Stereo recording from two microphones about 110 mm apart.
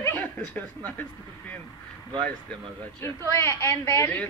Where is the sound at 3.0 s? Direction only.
25° left (ahead or behind).